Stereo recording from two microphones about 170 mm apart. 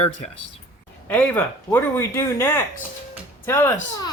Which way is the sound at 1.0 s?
10° left (ahead or behind).